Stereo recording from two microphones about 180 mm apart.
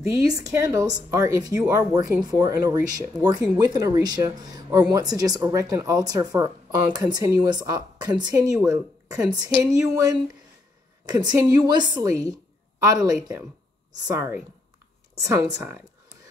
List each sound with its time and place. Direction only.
0.3 s speech: 20° right (ahead or behind)